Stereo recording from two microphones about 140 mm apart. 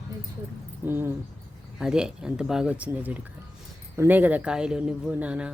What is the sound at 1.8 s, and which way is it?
Speech, 5° right (ahead or behind).